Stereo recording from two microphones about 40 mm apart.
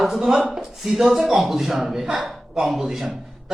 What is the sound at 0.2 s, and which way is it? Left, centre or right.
A man's voice, centre.